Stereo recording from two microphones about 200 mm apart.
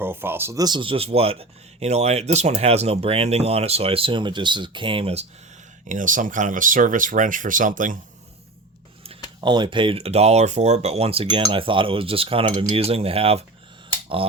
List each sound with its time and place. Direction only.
0.0 s speech: 10° right (ahead or behind); by 5.2 s 30° right (ahead or behind)
5.9 s speech: 40° right (ahead or behind)
9.4 s speech: 20° right (ahead or behind)